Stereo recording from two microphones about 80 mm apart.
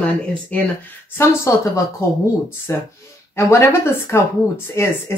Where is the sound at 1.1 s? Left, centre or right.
Left.